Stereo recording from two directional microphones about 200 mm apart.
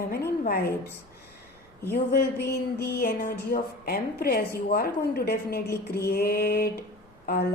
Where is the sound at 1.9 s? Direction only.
50° left (ahead or behind).